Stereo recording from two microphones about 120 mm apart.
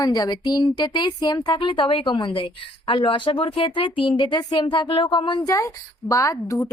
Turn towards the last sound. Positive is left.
turn(degrees=30)  # may be behind; listen again after turning